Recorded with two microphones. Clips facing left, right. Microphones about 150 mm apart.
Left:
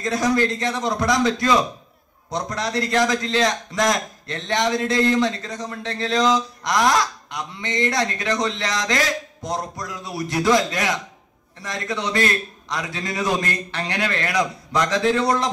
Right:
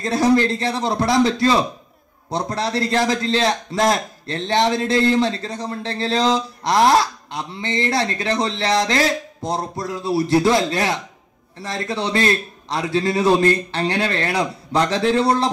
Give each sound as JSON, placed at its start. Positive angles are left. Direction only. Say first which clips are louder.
{"t": 0.0, "sound": "a man's voice", "louder": "right 4 dB", "side_deg": -30}